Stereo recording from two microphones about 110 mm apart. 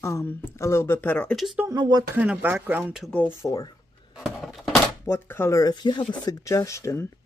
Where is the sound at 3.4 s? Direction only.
35° left (ahead or behind).